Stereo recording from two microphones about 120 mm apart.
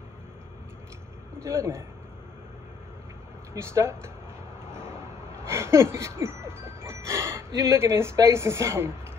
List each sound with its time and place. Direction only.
1.4 s speech: 20° right (ahead or behind)
3.5 s speech: 20° right (ahead or behind)
5.4 s music: 20° right (ahead or behind)